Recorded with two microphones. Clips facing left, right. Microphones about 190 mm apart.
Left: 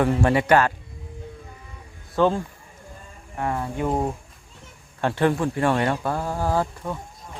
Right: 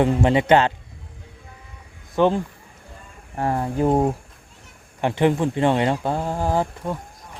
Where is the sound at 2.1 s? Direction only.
20° right (ahead or behind).